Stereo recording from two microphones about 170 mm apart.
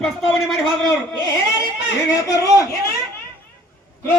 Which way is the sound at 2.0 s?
20° left (ahead or behind).